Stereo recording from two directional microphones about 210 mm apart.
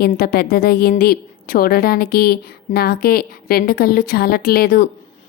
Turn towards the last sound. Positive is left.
turn(degrees=45)  # may be behind; listen again after turning